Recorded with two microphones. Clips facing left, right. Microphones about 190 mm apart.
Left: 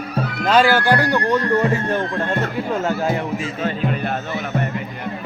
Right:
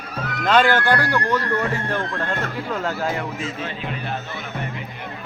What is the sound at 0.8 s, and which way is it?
Speech, 20° left (ahead or behind).